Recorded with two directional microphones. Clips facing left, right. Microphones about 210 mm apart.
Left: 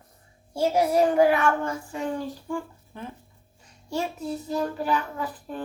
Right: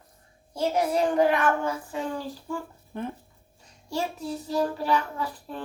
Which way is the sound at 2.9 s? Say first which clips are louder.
Right 6 dB; 55° right (ahead or behind).